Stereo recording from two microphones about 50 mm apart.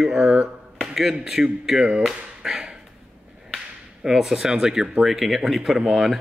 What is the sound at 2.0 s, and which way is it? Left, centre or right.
Chop, centre.